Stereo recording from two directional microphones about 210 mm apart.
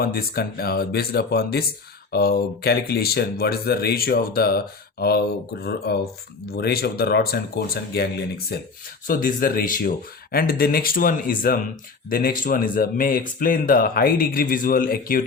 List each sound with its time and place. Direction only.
0.0 s speech: 45° left (ahead or behind)